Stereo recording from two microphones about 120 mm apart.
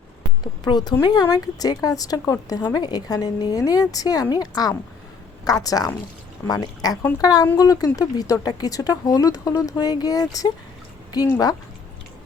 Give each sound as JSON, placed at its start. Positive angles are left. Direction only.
{"t": 0.4, "sound": "speech", "side_deg": 35}